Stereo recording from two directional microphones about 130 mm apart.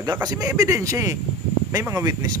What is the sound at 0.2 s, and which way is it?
Speech, 30° right (ahead or behind).